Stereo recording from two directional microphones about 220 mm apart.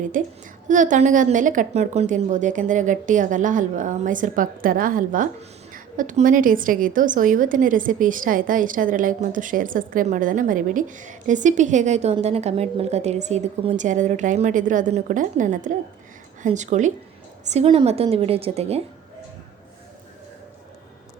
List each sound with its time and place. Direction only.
0.1 s a woman's voice: 35° right (ahead or behind)